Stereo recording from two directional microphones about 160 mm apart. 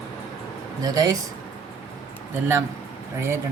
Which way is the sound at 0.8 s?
25° right (ahead or behind).